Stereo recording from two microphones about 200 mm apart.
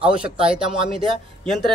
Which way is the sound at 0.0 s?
5° right (ahead or behind).